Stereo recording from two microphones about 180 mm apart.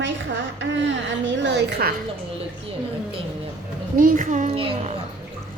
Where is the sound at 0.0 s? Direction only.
80° right.